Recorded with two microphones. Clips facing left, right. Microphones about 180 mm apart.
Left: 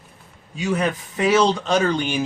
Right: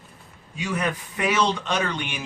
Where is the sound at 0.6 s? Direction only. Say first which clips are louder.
Left 5 dB; 25° left (ahead or behind).